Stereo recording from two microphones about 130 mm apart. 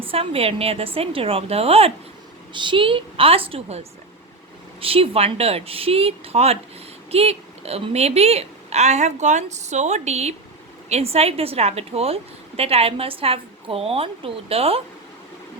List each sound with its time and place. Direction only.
0.1 s a woman's voice: 50° right (ahead or behind)
2.5 s a woman's voice: 40° right (ahead or behind)